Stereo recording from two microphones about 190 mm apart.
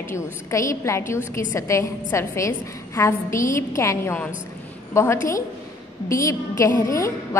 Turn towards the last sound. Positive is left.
turn(degrees=15)  # may be behind; listen again after turning